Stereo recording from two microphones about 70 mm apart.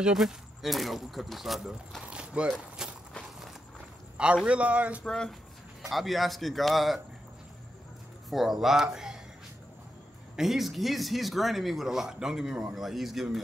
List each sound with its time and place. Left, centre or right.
0.0 s speech: centre
2.0 s a sound: centre
2.8 s walk: centre
4.5 s a man's voice: centre
5.0 s speech: centre
8.3 s speech: centre
10.3 s speech: centre